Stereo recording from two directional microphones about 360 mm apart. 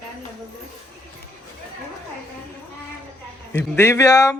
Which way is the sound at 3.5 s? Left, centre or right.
Centre.